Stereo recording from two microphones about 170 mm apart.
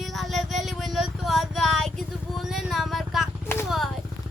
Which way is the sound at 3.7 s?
Centre (ahead or behind).